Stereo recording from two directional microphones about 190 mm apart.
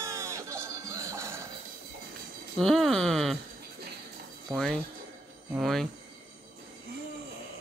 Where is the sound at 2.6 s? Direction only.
Centre (ahead or behind).